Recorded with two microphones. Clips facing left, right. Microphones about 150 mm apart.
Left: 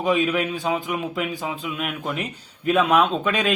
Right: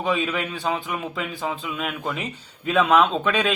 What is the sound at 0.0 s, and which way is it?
A man's voice, 5° left (ahead or behind).